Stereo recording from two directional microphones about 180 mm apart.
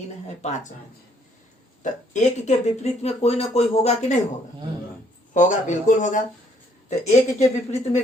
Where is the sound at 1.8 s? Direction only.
40° left (ahead or behind).